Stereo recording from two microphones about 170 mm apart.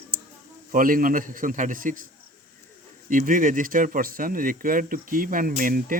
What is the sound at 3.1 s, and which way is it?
Speech, 50° right (ahead or behind).